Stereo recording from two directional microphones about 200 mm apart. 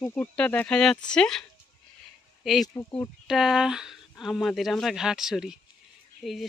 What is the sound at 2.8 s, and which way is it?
Speech, 15° left (ahead or behind).